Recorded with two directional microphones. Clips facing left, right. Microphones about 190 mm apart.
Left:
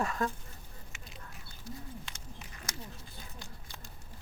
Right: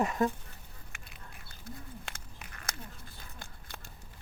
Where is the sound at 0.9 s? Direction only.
60° right (ahead or behind).